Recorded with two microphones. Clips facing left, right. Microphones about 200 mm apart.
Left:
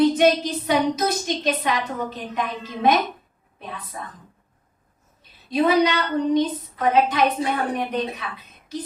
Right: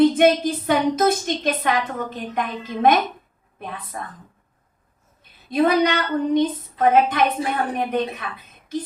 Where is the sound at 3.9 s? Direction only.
55° right (ahead or behind).